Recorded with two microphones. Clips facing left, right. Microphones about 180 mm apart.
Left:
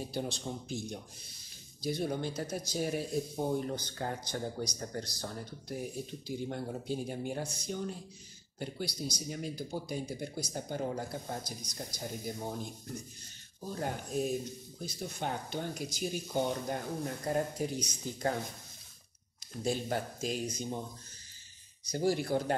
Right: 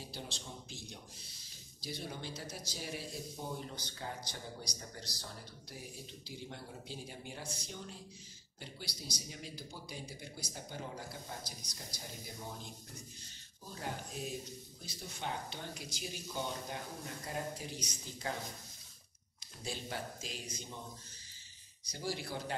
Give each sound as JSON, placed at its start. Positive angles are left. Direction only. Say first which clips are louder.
{"t": 0.0, "sound": "speech", "louder": "left 10 dB", "side_deg": 50}
{"t": 19.6, "sound": "speech", "louder": "left 9 dB", "side_deg": 45}
{"t": 21.9, "sound": "speech", "louder": "left 10 dB", "side_deg": 50}